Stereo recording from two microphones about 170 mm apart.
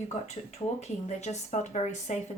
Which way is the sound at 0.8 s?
40° left (ahead or behind).